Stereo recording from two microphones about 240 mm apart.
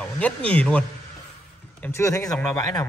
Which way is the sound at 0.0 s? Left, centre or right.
Centre.